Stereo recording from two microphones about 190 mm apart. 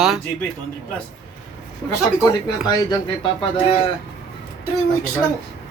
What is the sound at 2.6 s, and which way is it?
Speech, 25° left (ahead or behind).